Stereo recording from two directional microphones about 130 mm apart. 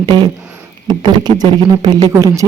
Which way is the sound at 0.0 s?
35° right (ahead or behind).